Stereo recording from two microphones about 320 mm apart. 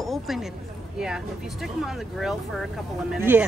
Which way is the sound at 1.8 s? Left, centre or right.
Centre.